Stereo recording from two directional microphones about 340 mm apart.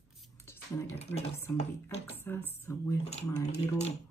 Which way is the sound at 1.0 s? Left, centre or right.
Centre.